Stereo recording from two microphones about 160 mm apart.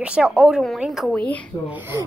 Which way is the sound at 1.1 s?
10° left (ahead or behind).